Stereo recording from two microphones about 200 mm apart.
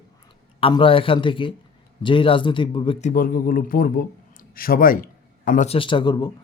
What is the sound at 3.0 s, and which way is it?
A man's voice, 40° left (ahead or behind).